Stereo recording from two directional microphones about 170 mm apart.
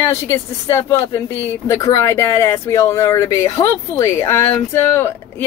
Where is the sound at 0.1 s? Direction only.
15° left (ahead or behind).